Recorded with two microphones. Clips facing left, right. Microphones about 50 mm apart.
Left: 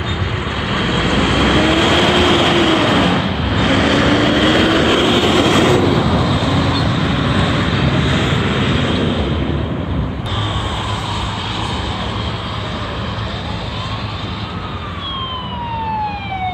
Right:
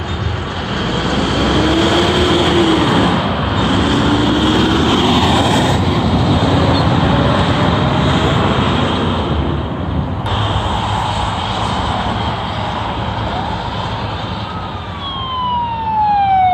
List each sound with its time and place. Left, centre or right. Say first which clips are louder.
0.8 s vehicle: left 1 dB; left
2.9 s vehicle: right 1 dB; left
3.2 s vehicle: right 2 dB; centre
3.7 s vehicle: left 2 dB; left
5.3 s vehicle: left 1 dB; left
5.9 s vehicle: even; centre